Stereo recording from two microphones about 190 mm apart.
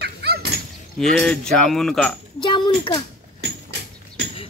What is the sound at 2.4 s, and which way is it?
Speech, 25° left (ahead or behind).